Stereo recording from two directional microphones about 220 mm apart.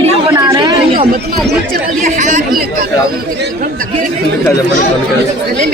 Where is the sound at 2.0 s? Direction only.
35° right (ahead or behind).